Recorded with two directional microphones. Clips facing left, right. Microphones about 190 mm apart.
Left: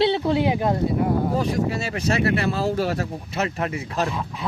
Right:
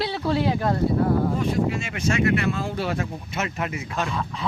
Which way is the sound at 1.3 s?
35° left (ahead or behind).